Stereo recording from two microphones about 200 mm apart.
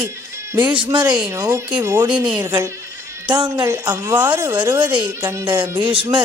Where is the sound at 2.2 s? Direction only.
20° right (ahead or behind).